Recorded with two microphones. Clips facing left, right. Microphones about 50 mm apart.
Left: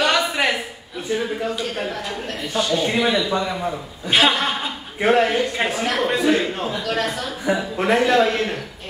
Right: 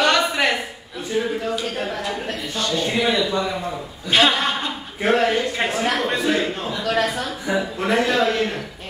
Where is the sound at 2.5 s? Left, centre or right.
Centre.